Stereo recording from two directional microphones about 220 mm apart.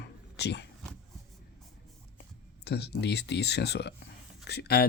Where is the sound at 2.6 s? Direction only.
50° left (ahead or behind).